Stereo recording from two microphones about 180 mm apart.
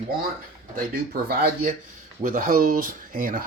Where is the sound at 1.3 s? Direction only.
55° right (ahead or behind).